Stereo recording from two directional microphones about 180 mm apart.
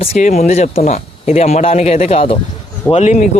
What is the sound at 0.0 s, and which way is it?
A man's voice, 40° left (ahead or behind).